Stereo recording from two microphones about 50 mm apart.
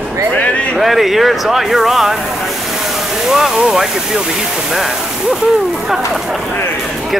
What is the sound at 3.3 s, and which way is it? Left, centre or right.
Speech, centre.